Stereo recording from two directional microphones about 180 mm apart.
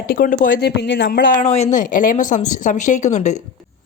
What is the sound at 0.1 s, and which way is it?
Speech, 50° left (ahead or behind).